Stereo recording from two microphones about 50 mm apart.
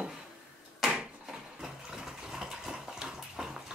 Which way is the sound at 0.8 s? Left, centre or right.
Centre.